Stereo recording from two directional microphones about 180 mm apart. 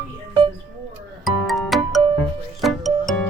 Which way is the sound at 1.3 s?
Centre (ahead or behind).